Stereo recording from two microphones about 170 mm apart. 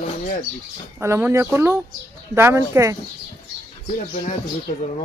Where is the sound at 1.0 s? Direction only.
15° right (ahead or behind).